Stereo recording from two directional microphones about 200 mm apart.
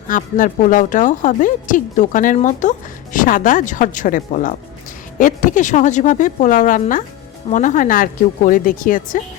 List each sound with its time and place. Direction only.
0.1 s a woman's voice: 40° left (ahead or behind)